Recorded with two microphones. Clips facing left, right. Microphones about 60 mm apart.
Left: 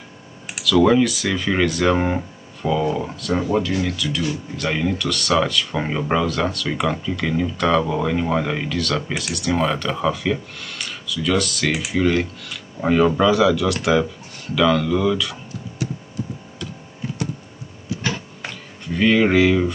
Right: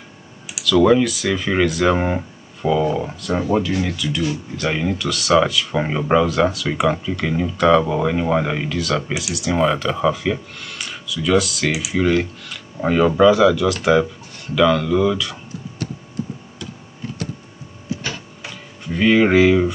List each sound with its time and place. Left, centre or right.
0.7 s speech: centre
18.0 s printer: left
18.9 s speech: centre